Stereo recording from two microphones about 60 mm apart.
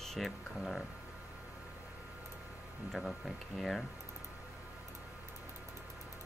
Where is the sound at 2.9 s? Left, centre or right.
Centre.